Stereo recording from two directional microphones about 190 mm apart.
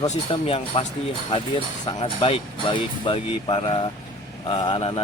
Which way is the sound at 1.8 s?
25° left (ahead or behind).